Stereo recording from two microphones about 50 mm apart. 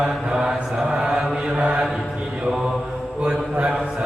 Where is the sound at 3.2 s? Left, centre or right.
Right.